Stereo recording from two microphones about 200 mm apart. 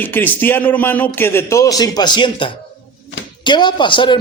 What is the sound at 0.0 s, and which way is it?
A man's voice, 10° left (ahead or behind).